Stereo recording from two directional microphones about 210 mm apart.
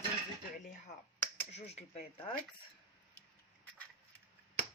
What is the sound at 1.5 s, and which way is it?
Speech, 30° left (ahead or behind).